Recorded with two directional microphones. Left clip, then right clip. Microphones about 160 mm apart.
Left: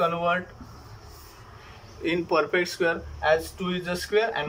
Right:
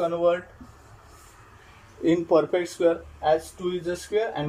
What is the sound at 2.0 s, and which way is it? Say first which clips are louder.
Speech: right 3 dB; 50° right (ahead or behind).